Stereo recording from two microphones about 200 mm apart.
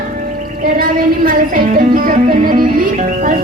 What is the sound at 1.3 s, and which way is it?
Music, 45° right (ahead or behind).